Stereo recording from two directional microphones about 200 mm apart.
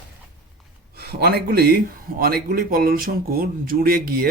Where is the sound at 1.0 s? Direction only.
55° right (ahead or behind).